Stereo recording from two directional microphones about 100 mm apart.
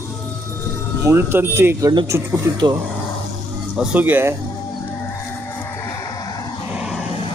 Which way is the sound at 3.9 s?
15° right (ahead or behind).